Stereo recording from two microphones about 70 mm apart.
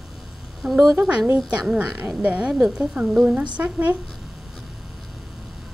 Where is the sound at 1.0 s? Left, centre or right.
Centre.